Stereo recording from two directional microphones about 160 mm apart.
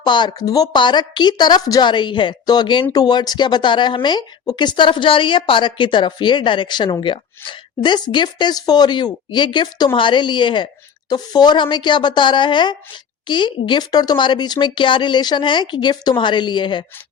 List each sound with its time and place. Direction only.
0.0 s speech: 30° left (ahead or behind)